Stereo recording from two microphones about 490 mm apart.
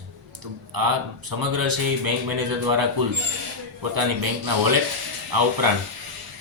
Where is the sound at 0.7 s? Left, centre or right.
Right.